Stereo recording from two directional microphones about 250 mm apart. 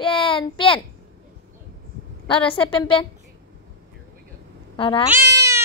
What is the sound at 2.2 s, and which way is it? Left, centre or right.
Speech, left.